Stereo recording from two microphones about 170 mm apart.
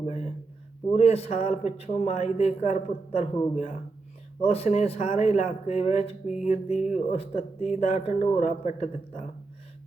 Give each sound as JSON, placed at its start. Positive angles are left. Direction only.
{"t": 0.0, "sound": "a sound", "side_deg": 40}
{"t": 0.9, "sound": "a man's voice", "side_deg": 35}
{"t": 4.4, "sound": "a man's voice", "side_deg": 35}